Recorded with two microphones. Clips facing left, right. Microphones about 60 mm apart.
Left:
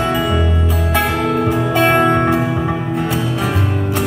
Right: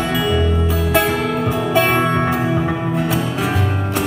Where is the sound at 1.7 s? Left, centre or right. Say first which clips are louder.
Left 2 dB; left.